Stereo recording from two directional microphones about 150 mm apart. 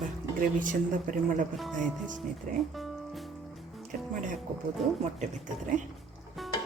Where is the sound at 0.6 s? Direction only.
60° right (ahead or behind).